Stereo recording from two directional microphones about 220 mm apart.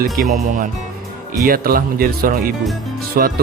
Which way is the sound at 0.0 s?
40° right (ahead or behind).